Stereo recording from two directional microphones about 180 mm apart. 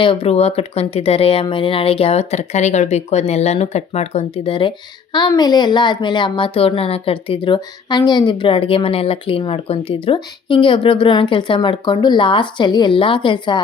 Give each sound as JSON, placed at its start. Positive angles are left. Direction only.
{"t": 0.0, "sound": "speech", "side_deg": 30}